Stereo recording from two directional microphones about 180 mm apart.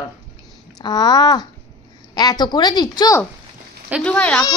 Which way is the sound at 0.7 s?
25° left (ahead or behind).